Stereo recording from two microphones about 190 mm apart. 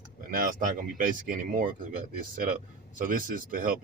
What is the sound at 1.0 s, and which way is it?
Speech, 45° right (ahead or behind).